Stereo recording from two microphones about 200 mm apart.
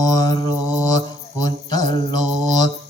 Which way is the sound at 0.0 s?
20° left (ahead or behind).